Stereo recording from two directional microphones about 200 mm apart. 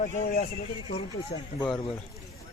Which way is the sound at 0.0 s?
45° left (ahead or behind).